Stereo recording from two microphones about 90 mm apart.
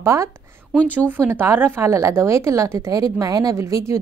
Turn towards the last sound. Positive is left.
turn(degrees=-35)  # may be behind; listen again after turning